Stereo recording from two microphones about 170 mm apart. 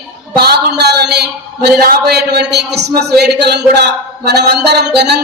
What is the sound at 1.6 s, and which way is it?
A man's voice, 65° right (ahead or behind).